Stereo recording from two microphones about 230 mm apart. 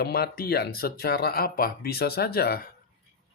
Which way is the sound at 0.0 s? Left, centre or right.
Left.